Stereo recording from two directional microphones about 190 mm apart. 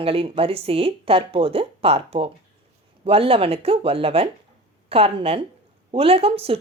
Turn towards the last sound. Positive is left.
turn(degrees=-30)  # may be behind; listen again after turning